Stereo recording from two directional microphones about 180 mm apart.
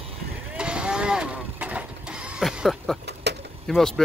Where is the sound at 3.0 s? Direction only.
65° right (ahead or behind).